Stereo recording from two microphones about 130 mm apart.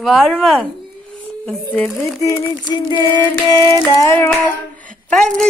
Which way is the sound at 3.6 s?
25° left (ahead or behind).